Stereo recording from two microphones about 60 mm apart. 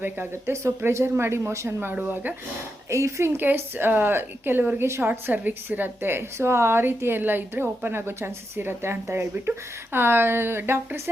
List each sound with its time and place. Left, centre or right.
0.0 s a woman's voice: right
0.5 s speech: right
1.8 s a woman's voice: right
2.9 s speech: right
3.4 s a woman's voice: right
4.8 s a woman's voice: right